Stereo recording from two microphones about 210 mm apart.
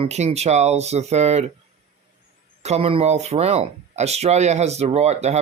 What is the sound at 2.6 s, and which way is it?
Speech, 30° right (ahead or behind).